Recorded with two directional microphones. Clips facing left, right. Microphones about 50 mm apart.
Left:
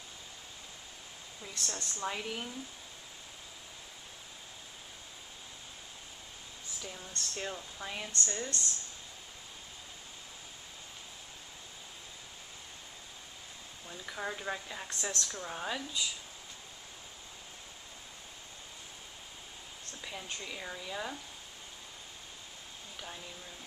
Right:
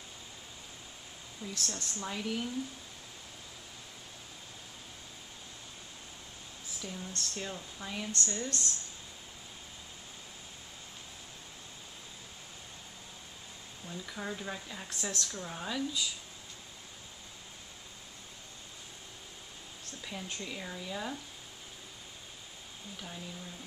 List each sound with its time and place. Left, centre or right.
1.5 s speech: centre
6.8 s speech: centre
13.8 s speech: centre
20.0 s speech: centre